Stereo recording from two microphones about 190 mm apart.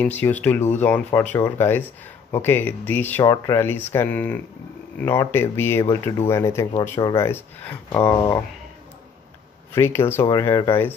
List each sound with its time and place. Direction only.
0.0 s speech: 10° left (ahead or behind)
7.2 s speech: 10° left (ahead or behind)
9.8 s speech: 15° left (ahead or behind)